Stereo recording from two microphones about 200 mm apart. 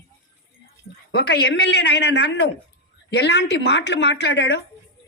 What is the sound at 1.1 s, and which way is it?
A man's voice, 55° left (ahead or behind).